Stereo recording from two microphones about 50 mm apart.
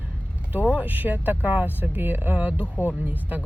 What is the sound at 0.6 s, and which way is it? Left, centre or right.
Speech, right.